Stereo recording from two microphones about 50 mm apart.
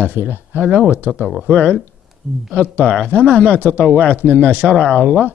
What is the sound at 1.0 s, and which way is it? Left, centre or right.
Speech, right.